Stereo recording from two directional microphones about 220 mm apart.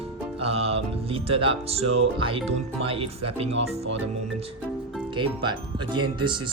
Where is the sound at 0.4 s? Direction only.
25° right (ahead or behind).